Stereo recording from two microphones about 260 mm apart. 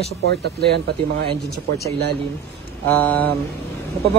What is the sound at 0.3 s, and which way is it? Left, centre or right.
Speech, right.